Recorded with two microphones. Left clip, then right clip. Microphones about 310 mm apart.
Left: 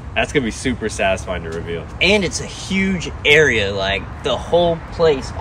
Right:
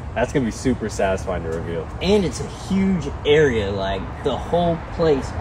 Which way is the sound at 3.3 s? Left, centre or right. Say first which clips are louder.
Left 4 dB; centre.